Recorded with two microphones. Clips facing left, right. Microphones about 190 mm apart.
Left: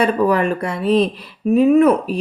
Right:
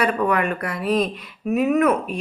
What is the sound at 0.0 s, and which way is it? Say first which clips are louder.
Speech: left 5 dB; 30° left (ahead or behind).